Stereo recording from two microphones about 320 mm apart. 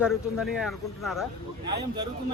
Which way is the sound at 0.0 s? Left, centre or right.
Centre.